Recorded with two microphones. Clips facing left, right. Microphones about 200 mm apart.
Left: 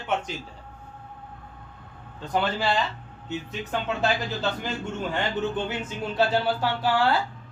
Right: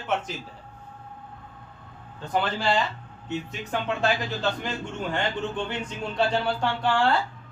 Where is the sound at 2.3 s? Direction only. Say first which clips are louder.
Even; centre (ahead or behind).